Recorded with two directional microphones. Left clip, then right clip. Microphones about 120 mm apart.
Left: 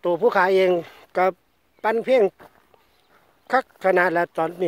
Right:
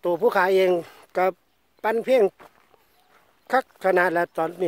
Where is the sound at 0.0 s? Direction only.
30° right (ahead or behind).